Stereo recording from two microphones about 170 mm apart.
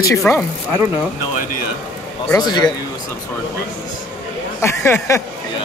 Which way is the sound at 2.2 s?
25° left (ahead or behind).